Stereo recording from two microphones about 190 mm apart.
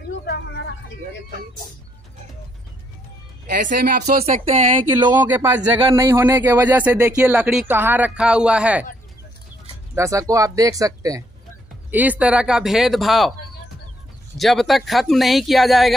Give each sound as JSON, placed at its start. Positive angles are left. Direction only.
{"t": 3.6, "sound": "speech", "side_deg": -50}
{"t": 4.9, "sound": "speech", "side_deg": -10}
{"t": 9.9, "sound": "speech", "side_deg": -15}
{"t": 14.3, "sound": "speech", "side_deg": 0}